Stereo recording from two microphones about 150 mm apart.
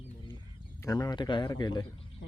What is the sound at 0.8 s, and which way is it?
A man's voice, 25° left (ahead or behind).